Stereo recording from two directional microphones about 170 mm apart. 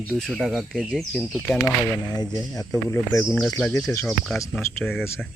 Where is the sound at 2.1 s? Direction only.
25° left (ahead or behind).